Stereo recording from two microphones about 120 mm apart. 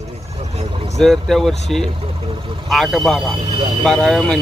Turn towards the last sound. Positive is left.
turn(degrees=0)  # may be behind; listen again after turning